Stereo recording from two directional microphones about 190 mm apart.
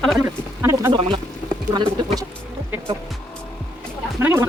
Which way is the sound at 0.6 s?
15° right (ahead or behind).